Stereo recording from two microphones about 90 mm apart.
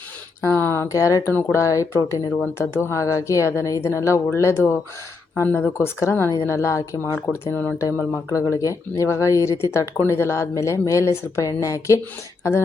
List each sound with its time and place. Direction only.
0.4 s speech: 25° left (ahead or behind)
1.3 s speech: 20° left (ahead or behind)
1.5 s a woman's voice: 35° left (ahead or behind)
5.5 s speech: 15° left (ahead or behind)
5.7 s a woman's voice: 30° left (ahead or behind)
7.5 s speech: 15° left (ahead or behind)
8.3 s a woman's voice: 35° left (ahead or behind)